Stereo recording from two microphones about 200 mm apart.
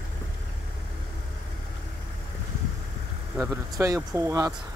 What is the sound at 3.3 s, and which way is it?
Speech, 15° right (ahead or behind).